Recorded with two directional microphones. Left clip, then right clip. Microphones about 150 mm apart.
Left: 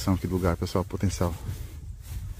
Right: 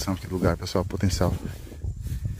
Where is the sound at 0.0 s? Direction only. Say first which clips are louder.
Right 1 dB; 10° right (ahead or behind).